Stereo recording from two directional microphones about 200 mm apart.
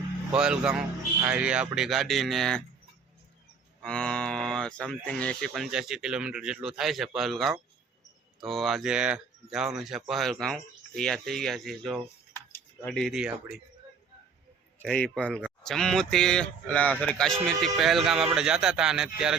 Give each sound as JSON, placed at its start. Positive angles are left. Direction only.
{"t": 0.3, "sound": "moo", "side_deg": -5}
{"t": 3.8, "sound": "moo", "side_deg": 5}
{"t": 12.5, "sound": "speech", "side_deg": 10}
{"t": 14.8, "sound": "moo", "side_deg": 5}